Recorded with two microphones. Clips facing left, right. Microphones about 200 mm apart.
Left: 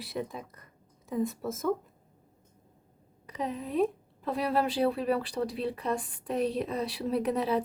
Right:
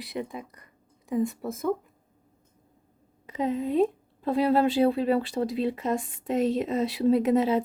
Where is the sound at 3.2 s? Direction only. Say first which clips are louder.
Right 7 dB; 25° right (ahead or behind).